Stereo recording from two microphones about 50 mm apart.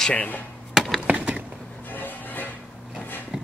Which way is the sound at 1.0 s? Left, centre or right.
Right.